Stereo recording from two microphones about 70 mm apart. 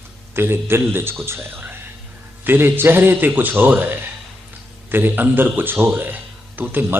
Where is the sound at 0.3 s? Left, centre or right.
Right.